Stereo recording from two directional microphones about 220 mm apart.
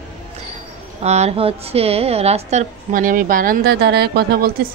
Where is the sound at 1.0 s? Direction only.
30° right (ahead or behind); by 4.5 s 45° right (ahead or behind).